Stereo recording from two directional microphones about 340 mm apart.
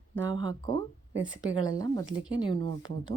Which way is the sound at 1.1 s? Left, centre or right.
Right.